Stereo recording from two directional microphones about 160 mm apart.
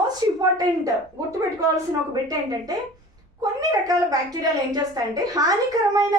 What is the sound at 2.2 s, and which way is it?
A child's voice, 25° right (ahead or behind).